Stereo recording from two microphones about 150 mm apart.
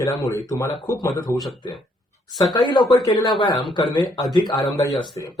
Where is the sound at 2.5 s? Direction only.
30° left (ahead or behind).